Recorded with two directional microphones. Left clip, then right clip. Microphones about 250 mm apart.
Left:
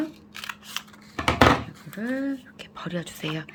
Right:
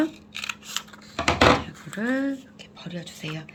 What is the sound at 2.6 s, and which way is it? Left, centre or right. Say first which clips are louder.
Speech: left 5 dB; centre.